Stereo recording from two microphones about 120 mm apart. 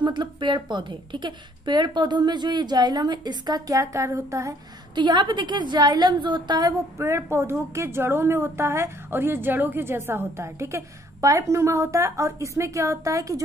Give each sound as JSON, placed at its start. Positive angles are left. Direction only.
{"t": 0.0, "sound": "a woman's voice", "side_deg": -40}
{"t": 4.9, "sound": "a woman's voice", "side_deg": -40}
{"t": 7.0, "sound": "a woman's voice", "side_deg": -20}